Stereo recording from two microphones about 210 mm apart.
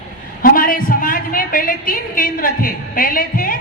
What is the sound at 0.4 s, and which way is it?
A woman's voice, 40° left (ahead or behind).